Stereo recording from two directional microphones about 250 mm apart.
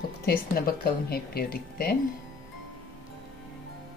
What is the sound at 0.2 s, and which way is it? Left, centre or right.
A woman's voice, left.